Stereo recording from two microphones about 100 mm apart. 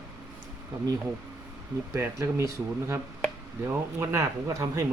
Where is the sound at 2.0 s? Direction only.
25° right (ahead or behind).